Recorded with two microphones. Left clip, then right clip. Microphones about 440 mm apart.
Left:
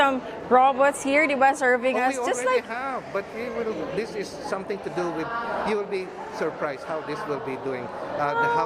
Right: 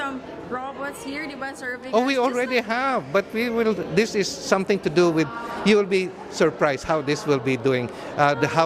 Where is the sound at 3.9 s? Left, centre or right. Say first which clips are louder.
Right 7 dB; right.